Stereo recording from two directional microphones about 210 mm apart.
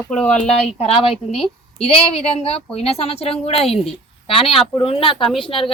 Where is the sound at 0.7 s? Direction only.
25° left (ahead or behind).